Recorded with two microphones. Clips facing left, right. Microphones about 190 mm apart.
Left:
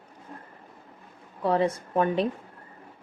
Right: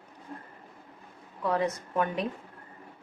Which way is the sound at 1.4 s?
30° left (ahead or behind).